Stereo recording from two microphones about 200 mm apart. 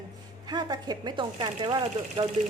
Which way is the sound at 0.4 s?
20° right (ahead or behind).